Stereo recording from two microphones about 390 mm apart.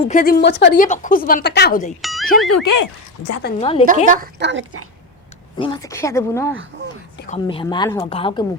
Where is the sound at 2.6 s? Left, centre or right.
Left.